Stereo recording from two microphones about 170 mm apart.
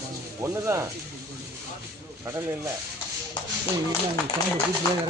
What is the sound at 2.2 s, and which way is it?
Speech, 10° right (ahead or behind).